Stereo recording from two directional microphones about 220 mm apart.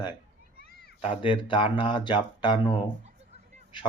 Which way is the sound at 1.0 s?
25° left (ahead or behind).